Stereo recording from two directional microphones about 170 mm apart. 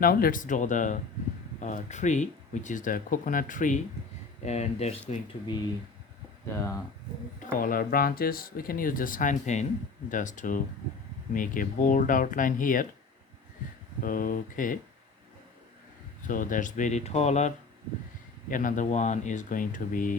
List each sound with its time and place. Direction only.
0.0 s speech: 60° left (ahead or behind)
4.4 s speech: 40° left (ahead or behind)
7.3 s speech: 55° left (ahead or behind)
14.0 s speech: 55° left (ahead or behind)
16.2 s speech: 50° left (ahead or behind)
18.5 s speech: 50° left (ahead or behind)